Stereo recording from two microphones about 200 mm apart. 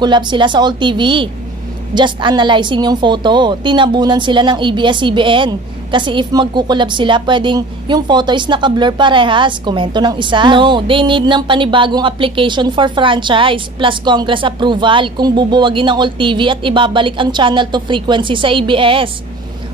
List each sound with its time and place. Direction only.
0.0 s a woman's voice: 25° right (ahead or behind)